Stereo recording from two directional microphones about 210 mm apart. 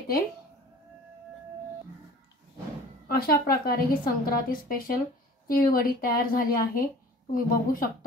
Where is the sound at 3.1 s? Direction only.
45° left (ahead or behind).